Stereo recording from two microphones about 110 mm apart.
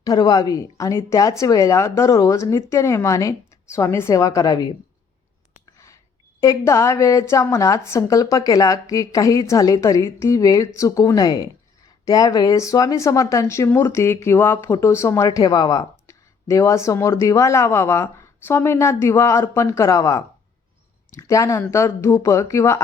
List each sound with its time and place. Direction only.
0.0 s speech: 35° left (ahead or behind)
6.4 s a woman's voice: 30° left (ahead or behind)